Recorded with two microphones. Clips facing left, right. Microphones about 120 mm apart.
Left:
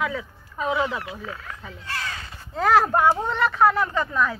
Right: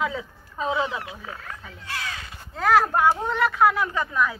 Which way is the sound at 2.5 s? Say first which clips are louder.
Left 1 dB; centre (ahead or behind).